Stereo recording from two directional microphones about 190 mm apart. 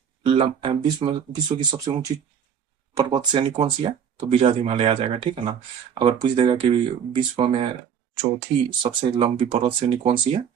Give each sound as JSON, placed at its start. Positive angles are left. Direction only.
{"t": 0.2, "sound": "speech", "side_deg": -30}
{"t": 8.8, "sound": "speech", "side_deg": -30}